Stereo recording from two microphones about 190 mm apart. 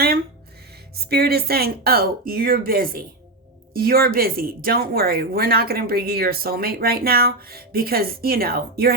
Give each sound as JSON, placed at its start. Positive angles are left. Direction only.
{"t": 1.1, "sound": "speech", "side_deg": -55}